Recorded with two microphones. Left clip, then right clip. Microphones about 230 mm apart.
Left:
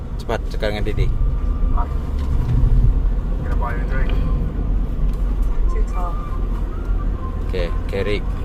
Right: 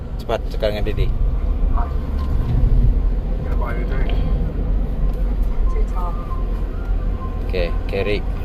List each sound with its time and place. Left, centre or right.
0.3 s speech: centre
7.5 s speech: centre